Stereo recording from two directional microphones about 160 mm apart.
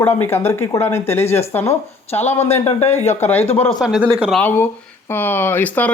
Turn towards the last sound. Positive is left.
turn(degrees=10)  # may be behind; listen again after turning